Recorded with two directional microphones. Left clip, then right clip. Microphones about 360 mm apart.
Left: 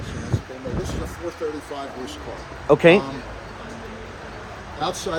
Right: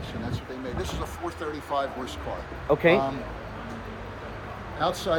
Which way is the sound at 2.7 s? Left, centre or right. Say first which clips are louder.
Left 7 dB; left.